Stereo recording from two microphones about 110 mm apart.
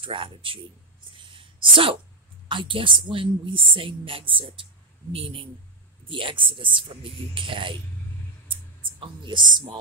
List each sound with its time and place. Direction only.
0.0 s a woman's voice: 50° right (ahead or behind)
1.1 s a sound: 50° right (ahead or behind)
2.4 s a woman's voice: 50° right (ahead or behind)
9.0 s a woman's voice: 45° right (ahead or behind)